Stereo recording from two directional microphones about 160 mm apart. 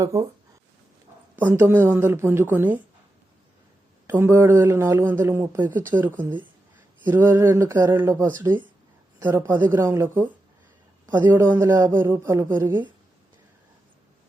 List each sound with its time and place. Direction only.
0.0 s speech: 20° right (ahead or behind)
1.4 s speech: 15° right (ahead or behind)
4.0 s speech: 15° right (ahead or behind)